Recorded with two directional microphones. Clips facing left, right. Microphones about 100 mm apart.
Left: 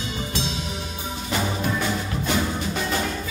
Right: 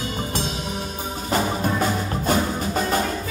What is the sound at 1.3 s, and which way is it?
Music, 40° right (ahead or behind).